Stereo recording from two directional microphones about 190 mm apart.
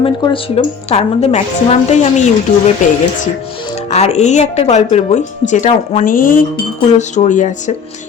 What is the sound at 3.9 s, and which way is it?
A woman's voice, 35° left (ahead or behind).